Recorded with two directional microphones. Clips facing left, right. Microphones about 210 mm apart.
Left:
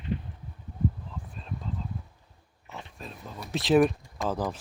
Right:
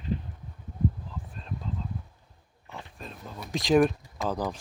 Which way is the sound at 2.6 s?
20° left (ahead or behind).